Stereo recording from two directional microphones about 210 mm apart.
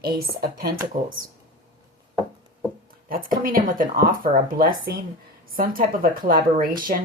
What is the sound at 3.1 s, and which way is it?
Speech, 40° right (ahead or behind).